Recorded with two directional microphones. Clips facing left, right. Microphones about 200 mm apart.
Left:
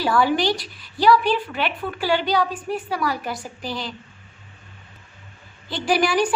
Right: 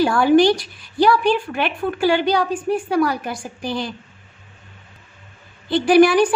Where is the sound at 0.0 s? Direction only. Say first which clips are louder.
Right 6 dB; 50° right (ahead or behind).